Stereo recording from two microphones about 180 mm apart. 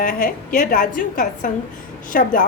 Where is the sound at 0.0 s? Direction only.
50° left (ahead or behind).